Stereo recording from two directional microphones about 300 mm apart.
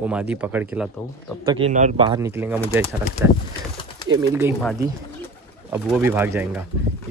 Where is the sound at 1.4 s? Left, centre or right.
Centre.